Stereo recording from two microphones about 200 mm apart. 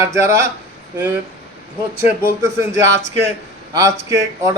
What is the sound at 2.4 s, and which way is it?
Speech, 15° right (ahead or behind).